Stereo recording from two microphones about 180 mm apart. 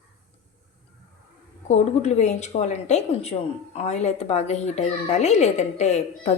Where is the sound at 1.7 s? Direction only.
40° left (ahead or behind).